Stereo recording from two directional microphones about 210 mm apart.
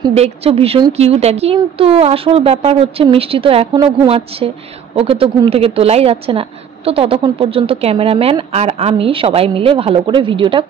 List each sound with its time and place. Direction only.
0.1 s a woman's voice: 30° right (ahead or behind)